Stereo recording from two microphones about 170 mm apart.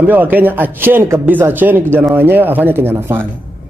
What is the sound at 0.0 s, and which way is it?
A man's voice, 10° right (ahead or behind).